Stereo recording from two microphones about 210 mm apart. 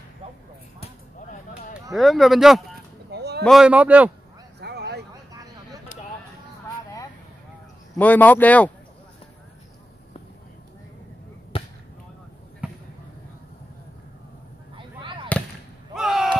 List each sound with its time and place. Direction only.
2.0 s speech: centre (ahead or behind)
3.1 s a sound: 50° right (ahead or behind)
3.4 s speech: 5° right (ahead or behind)
4.6 s a sound: 50° right (ahead or behind)
7.9 s speech: 10° left (ahead or behind)
11.5 s basketball bounce: 25° left (ahead or behind)
12.6 s basketball bounce: 5° right (ahead or behind)
15.0 s fireworks: 25° right (ahead or behind)
15.9 s slam: centre (ahead or behind)